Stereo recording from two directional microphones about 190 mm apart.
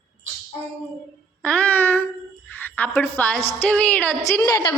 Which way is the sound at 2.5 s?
10° left (ahead or behind).